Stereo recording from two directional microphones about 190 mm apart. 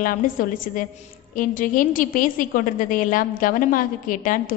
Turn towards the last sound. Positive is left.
turn(degrees=45)  # may be behind; listen again after turning